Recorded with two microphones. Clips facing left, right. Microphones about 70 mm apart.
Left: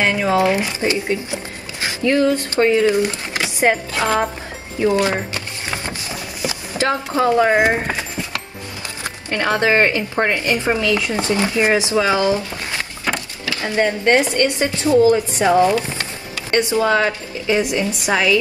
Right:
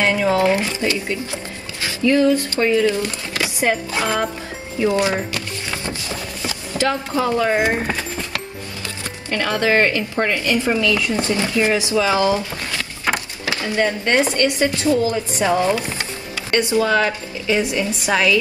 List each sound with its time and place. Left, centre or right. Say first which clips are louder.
0.0 s speech: even; left
4.7 s speech: left 1 dB; left
5.3 s music: even; left
6.9 s speech: left 4 dB; left
7.6 s clip-clop: left 2 dB; left
9.3 s speech: left 1 dB; left
13.0 s a sound: right 3 dB; right
13.6 s speech: left 2 dB; left